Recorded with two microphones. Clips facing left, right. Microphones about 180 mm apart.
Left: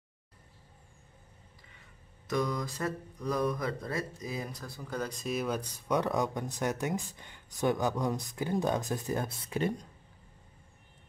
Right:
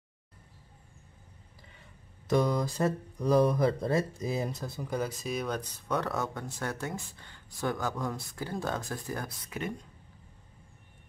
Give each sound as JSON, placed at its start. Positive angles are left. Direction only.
{"t": 2.2, "sound": "speech", "side_deg": -30}
{"t": 4.9, "sound": "speech", "side_deg": -5}